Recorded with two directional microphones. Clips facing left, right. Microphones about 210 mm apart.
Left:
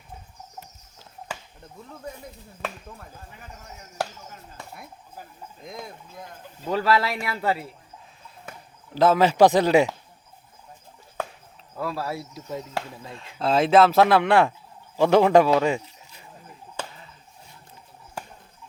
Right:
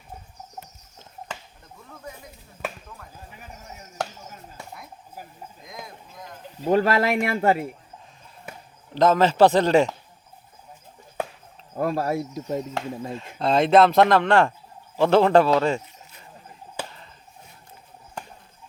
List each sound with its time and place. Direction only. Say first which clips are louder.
6.7 s speech: right 3 dB; 45° right (ahead or behind)
9.0 s a man's voice: even; 10° left (ahead or behind)
11.7 s speech: right 6 dB; 45° right (ahead or behind)
13.4 s a man's voice: right 1 dB; centre (ahead or behind)